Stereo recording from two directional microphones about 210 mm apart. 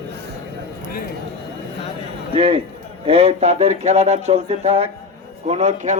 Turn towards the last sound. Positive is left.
turn(degrees=-35)  # may be behind; listen again after turning